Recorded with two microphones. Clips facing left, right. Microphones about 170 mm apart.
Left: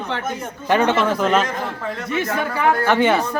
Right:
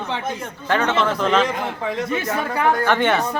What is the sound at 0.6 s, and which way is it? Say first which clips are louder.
Speech: left 3 dB; 15° left (ahead or behind).